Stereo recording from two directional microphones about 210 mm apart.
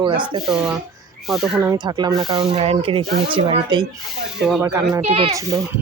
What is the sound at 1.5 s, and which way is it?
Speech, 15° right (ahead or behind).